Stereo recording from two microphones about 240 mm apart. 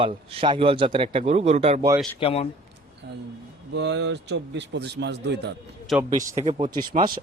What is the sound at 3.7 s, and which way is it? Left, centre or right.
A man's voice, right.